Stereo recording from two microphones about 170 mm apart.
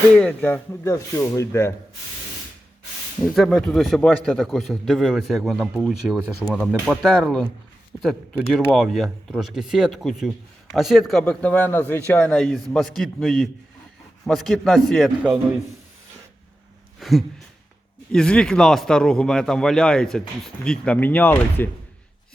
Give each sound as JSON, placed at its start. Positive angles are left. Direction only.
{"t": 0.2, "sound": "speech", "side_deg": 10}
{"t": 3.3, "sound": "speech", "side_deg": 0}
{"t": 17.0, "sound": "a sound", "side_deg": 0}
{"t": 18.1, "sound": "speech", "side_deg": 5}